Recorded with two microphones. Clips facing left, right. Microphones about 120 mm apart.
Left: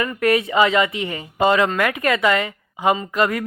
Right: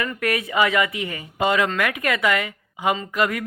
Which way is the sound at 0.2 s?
30° left (ahead or behind).